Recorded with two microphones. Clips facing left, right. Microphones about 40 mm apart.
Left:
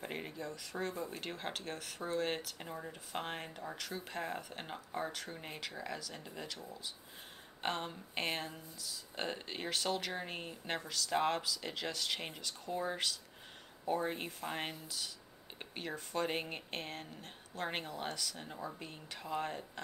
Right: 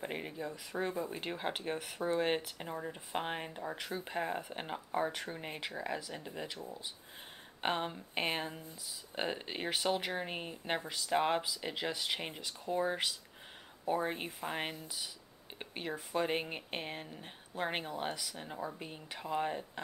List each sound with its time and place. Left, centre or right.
0.0 s speech: centre